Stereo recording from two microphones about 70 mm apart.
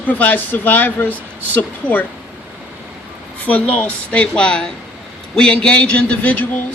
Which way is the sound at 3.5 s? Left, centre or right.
Centre.